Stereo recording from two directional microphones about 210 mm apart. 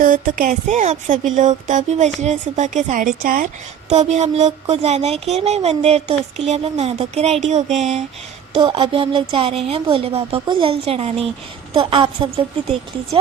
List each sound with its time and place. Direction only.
0.0 s a woman's voice: 40° right (ahead or behind); by 12.3 s 25° right (ahead or behind)